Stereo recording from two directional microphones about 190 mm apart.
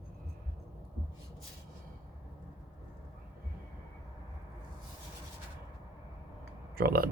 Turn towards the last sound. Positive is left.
turn(degrees=-55)  # may be behind; listen again after turning